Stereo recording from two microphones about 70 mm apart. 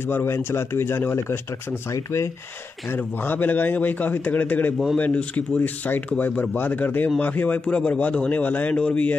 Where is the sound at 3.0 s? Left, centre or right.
Left.